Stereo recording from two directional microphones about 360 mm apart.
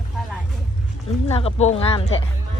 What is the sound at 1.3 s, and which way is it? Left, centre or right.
Speech, centre.